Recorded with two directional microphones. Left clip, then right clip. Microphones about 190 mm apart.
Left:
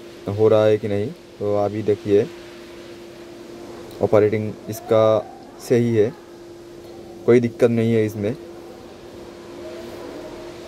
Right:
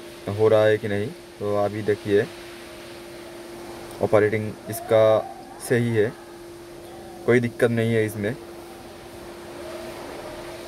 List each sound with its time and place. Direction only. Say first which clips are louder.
0.4 s speech: left 2 dB; 10° left (ahead or behind)
4.1 s speech: left 3 dB; 10° left (ahead or behind)
7.2 s speech: left 4 dB; 10° left (ahead or behind)